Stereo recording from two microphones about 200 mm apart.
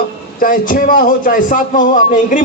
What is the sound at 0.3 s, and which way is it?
A man's voice, 45° left (ahead or behind).